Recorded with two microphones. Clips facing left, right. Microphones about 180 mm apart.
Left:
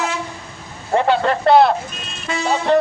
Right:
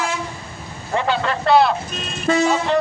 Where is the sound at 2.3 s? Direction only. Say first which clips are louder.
Right 8 dB; 45° right (ahead or behind).